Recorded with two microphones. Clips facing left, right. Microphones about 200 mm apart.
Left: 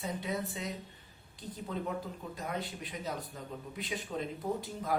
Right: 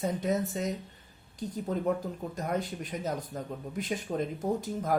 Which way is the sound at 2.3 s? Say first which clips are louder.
Right 6 dB; 45° right (ahead or behind).